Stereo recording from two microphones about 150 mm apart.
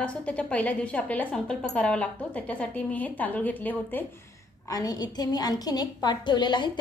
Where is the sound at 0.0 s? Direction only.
10° left (ahead or behind).